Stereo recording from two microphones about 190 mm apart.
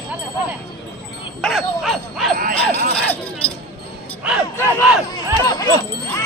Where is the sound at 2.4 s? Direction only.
45° right (ahead or behind).